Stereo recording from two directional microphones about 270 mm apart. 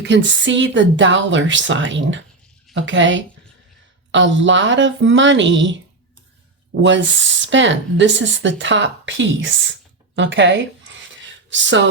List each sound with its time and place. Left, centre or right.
0.0 s speech: right
6.8 s speech: right